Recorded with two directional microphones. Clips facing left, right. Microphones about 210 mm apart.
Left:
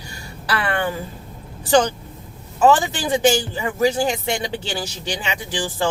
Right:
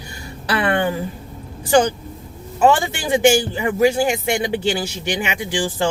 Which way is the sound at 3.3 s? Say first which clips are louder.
Right 4 dB; 15° right (ahead or behind).